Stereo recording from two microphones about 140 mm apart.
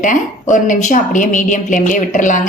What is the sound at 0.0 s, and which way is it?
Speech, 60° left (ahead or behind).